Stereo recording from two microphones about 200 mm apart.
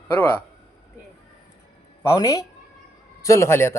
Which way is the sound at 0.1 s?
10° left (ahead or behind).